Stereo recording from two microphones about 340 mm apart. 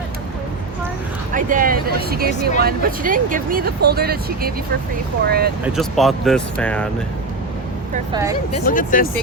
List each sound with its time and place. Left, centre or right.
1.3 s speech: right
5.6 s speech: centre
8.1 s a woman's voice: centre
8.6 s speech: left